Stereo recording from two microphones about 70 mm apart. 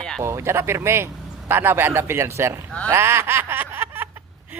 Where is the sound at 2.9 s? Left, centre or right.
Right.